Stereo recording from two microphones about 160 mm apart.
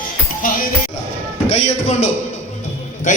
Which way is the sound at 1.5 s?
50° left (ahead or behind).